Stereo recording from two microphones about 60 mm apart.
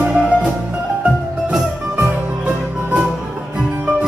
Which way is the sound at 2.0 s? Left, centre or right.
Right.